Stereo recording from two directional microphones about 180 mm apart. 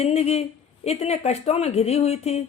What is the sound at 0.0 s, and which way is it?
Speech, 35° left (ahead or behind).